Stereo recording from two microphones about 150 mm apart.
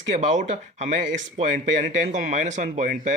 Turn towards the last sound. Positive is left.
turn(degrees=-55)  # may be behind; listen again after turning